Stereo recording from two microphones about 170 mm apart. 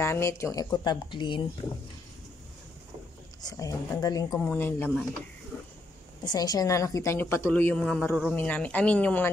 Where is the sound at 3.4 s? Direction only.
20° left (ahead or behind).